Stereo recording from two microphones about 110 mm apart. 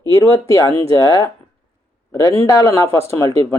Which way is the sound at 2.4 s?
30° left (ahead or behind).